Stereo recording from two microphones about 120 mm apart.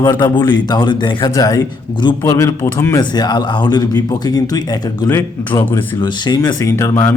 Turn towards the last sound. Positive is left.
turn(degrees=25)  # may be behind; listen again after turning